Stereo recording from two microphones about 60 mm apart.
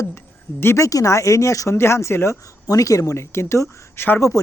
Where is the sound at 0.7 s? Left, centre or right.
Left.